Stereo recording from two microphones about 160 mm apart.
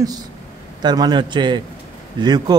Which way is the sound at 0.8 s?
25° right (ahead or behind).